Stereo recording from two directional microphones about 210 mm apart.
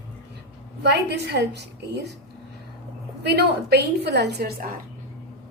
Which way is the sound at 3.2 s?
50° right (ahead or behind).